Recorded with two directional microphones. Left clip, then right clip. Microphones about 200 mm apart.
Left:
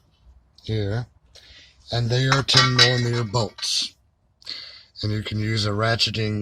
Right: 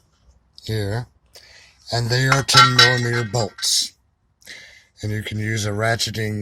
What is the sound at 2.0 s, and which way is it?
Speech, 10° right (ahead or behind).